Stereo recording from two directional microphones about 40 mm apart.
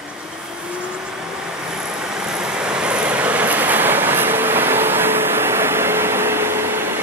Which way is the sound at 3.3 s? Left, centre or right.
Right.